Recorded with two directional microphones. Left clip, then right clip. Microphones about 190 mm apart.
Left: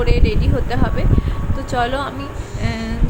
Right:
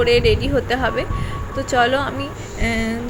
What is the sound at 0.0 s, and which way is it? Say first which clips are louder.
A woman's voice: right 6 dB; 10° right (ahead or behind).